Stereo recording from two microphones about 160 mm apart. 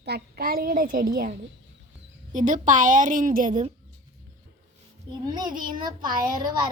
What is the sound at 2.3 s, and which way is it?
A woman's voice, 55° right (ahead or behind).